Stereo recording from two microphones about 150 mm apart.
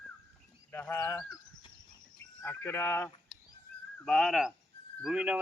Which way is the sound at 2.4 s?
15° left (ahead or behind).